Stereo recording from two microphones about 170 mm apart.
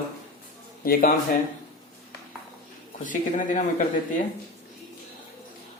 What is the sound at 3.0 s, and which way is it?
Speech, 50° left (ahead or behind).